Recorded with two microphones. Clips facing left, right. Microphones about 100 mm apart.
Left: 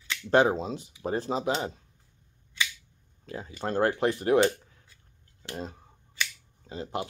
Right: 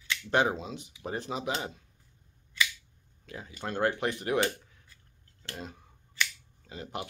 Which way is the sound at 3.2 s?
35° left (ahead or behind).